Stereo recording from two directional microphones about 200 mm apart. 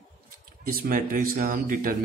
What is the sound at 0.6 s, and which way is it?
Speech, 45° right (ahead or behind).